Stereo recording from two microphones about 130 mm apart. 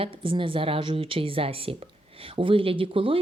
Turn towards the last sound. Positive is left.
turn(degrees=-45)  # may be behind; listen again after turning